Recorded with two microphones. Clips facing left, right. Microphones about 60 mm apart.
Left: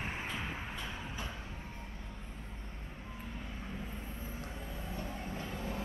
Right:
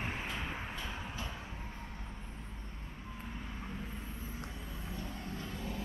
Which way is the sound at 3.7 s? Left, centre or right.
Centre.